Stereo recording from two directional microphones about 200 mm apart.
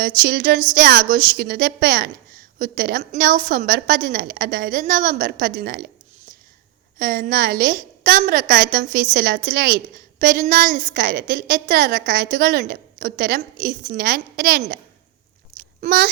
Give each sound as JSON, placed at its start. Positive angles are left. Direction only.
{"t": 0.3, "sound": "a woman's voice", "side_deg": -45}
{"t": 7.0, "sound": "a woman's voice", "side_deg": -45}
{"t": 15.8, "sound": "a child's voice", "side_deg": -45}